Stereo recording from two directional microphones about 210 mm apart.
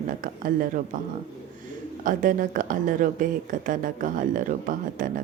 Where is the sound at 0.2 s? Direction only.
40° right (ahead or behind).